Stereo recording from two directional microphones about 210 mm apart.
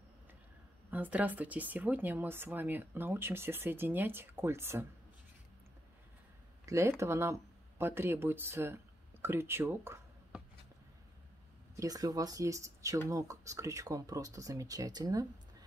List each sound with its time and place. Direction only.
0.8 s speech: 10° right (ahead or behind)
6.6 s speech: 15° right (ahead or behind)
11.7 s speech: 15° right (ahead or behind)